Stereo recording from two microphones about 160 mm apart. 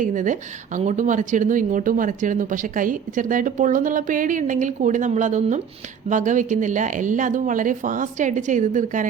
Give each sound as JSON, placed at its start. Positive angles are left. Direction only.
{"t": 0.0, "sound": "a woman's voice", "side_deg": -50}